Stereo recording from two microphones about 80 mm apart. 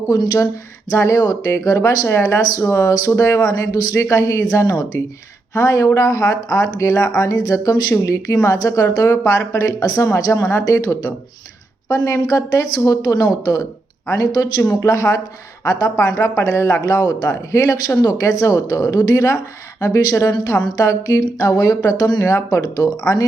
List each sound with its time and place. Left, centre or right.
0.1 s speech: left
2.0 s speech: left
7.2 s speech: left
20.7 s speech: left
22.2 s speech: left
22.6 s speech: left